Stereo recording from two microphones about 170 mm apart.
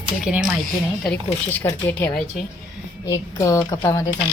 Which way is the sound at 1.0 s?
10° left (ahead or behind).